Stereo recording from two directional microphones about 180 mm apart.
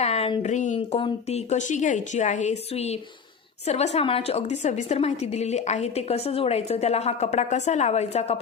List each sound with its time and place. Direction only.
0.0 s a woman's voice: 35° left (ahead or behind)